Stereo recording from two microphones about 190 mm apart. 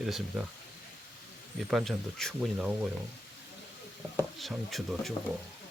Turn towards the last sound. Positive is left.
turn(degrees=0)  # may be behind; listen again after turning